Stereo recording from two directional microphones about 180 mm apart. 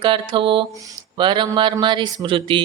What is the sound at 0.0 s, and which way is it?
Speech, 25° right (ahead or behind).